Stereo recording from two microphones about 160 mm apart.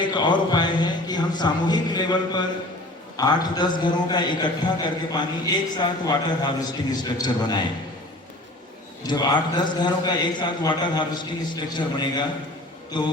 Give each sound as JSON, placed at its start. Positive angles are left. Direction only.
{"t": 0.0, "sound": "a man's voice", "side_deg": 30}
{"t": 9.0, "sound": "a man's voice", "side_deg": 25}